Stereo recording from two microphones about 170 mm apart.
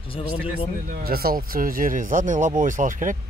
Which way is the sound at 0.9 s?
60° right (ahead or behind).